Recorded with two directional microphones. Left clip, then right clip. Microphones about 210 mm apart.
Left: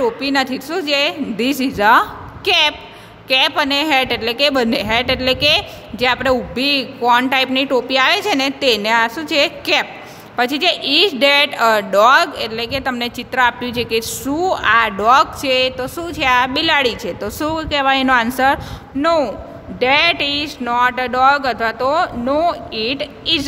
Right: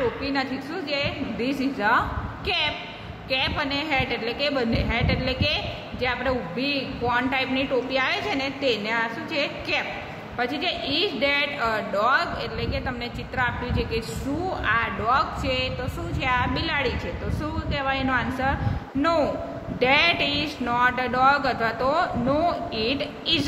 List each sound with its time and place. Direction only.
0.2 s a woman's voice: 55° left (ahead or behind)